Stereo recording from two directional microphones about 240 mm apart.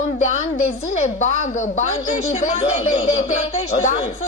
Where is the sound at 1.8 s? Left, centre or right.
Left.